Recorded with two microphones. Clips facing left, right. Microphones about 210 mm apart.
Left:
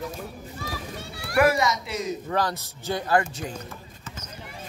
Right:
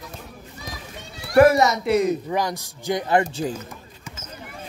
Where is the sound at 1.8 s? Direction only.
60° right (ahead or behind).